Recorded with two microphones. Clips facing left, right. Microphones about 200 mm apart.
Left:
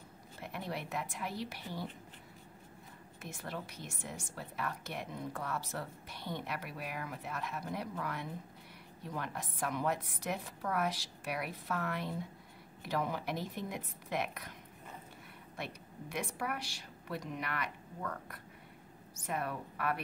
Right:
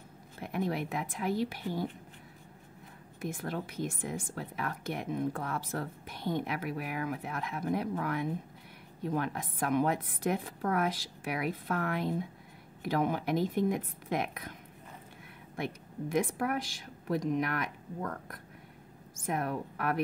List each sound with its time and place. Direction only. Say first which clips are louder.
0.4 s a woman's voice: right 8 dB; 50° right (ahead or behind)
3.3 s a woman's voice: right 7 dB; 55° right (ahead or behind)
16.2 s a woman's voice: right 8 dB; 50° right (ahead or behind)
16.5 s a woman's voice: right 8 dB; 90° right
17.3 s a woman's voice: right 8 dB; 45° right (ahead or behind)